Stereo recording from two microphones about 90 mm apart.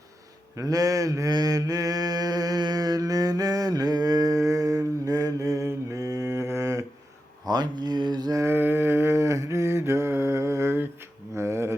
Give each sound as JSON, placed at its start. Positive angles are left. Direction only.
{"t": 0.5, "sound": "mantra", "side_deg": -40}
{"t": 7.4, "sound": "speech", "side_deg": -50}
{"t": 8.4, "sound": "mantra", "side_deg": -25}
{"t": 11.3, "sound": "a sound", "side_deg": -30}